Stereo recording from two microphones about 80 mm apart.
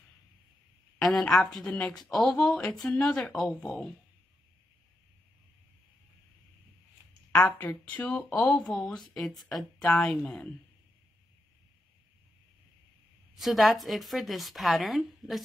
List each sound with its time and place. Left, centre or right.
1.0 s speech: centre
8.0 s speech: centre
13.3 s speech: centre